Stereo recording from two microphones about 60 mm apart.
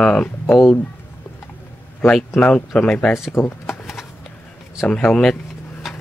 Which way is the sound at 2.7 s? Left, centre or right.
Left.